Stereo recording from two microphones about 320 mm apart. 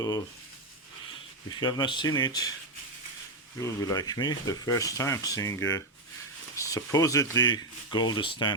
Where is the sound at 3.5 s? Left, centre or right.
Centre.